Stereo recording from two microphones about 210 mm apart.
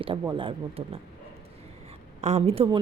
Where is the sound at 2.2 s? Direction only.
30° right (ahead or behind).